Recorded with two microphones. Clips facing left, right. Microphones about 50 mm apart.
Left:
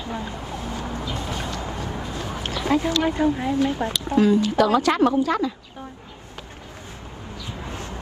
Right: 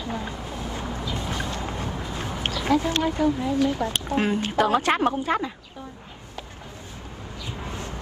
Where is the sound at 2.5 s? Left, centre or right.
Left.